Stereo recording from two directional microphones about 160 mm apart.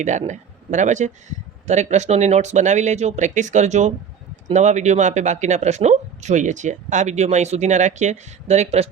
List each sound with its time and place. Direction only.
0.0 s speech: 50° right (ahead or behind)